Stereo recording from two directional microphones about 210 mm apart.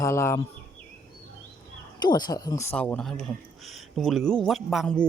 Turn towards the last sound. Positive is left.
turn(degrees=0)  # may be behind; listen again after turning